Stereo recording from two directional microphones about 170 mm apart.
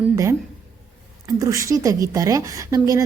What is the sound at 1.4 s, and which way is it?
A woman's voice, 20° right (ahead or behind).